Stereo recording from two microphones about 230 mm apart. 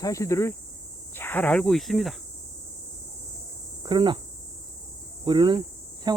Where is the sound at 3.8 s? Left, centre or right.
Centre.